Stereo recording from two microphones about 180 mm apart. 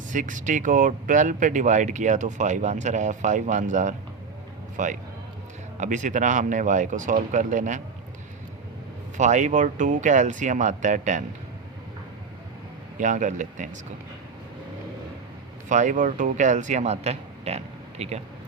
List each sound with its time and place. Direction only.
0.1 s speech: 45° right (ahead or behind)
9.1 s speech: 40° right (ahead or behind)
13.0 s speech: 45° right (ahead or behind)
15.7 s a man's voice: 45° right (ahead or behind)